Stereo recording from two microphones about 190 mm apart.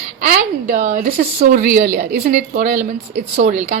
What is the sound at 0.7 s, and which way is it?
A woman's voice, 50° right (ahead or behind).